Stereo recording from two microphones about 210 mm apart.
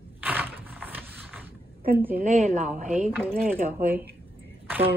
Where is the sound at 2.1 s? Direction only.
35° right (ahead or behind).